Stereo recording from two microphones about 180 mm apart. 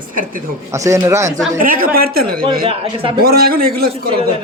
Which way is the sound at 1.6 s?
50° right (ahead or behind).